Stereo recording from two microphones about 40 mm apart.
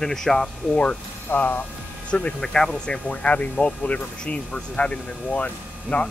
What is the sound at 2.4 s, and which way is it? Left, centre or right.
Speech, centre.